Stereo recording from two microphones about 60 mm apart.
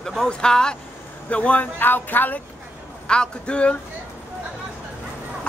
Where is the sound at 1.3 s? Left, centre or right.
Left.